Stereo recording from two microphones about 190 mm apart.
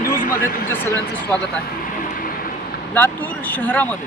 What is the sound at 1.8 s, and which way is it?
Vehicle, 50° left (ahead or behind).